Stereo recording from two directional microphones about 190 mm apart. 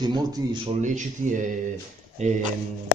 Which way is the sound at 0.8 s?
40° right (ahead or behind).